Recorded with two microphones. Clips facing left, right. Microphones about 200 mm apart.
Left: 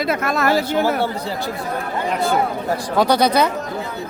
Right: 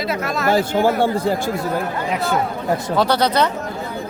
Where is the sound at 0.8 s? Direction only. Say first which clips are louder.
Right 3 dB; 50° right (ahead or behind).